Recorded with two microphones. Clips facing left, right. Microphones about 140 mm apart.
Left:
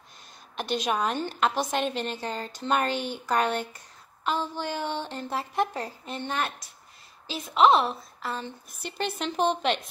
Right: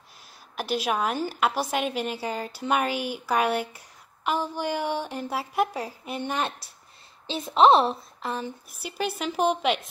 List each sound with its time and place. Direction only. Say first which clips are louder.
0.6 s a woman's voice: right 1 dB; 5° right (ahead or behind)
7.2 s a woman's voice: right 2 dB; 30° right (ahead or behind)
8.3 s a woman's voice: right 3 dB; 10° right (ahead or behind)